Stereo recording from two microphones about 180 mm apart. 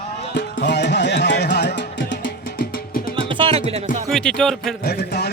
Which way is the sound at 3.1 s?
30° right (ahead or behind).